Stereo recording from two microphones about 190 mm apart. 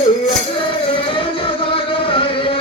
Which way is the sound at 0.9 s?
30° left (ahead or behind).